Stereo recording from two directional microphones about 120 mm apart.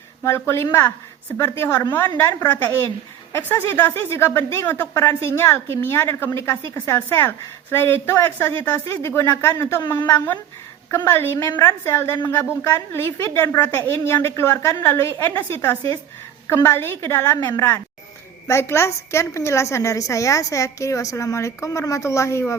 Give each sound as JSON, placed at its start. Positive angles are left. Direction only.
{"t": 0.2, "sound": "a woman's voice", "side_deg": 20}